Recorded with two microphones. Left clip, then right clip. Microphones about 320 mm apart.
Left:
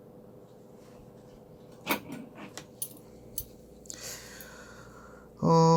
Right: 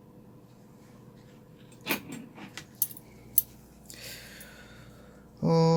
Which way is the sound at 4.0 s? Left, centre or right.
Centre.